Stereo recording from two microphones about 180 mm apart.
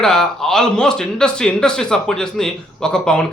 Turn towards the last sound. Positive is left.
turn(degrees=5)  # may be behind; listen again after turning